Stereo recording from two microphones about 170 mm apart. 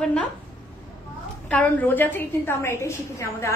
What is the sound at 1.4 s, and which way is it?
A woman's voice, 10° left (ahead or behind).